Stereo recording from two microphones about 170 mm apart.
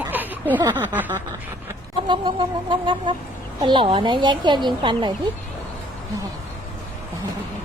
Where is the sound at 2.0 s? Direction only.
25° right (ahead or behind).